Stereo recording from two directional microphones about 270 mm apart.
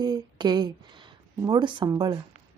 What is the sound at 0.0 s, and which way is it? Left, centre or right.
Speech, centre.